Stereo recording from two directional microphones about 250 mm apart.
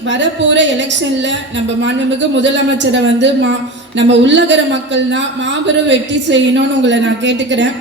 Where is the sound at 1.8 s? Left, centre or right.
Right.